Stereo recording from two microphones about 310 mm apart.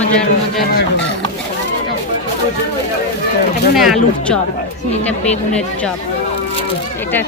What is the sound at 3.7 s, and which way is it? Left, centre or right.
Speech, centre.